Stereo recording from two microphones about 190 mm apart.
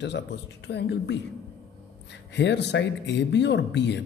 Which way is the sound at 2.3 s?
65° left (ahead or behind).